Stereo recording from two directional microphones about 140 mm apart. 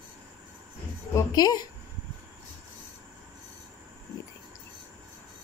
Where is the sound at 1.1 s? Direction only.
30° left (ahead or behind).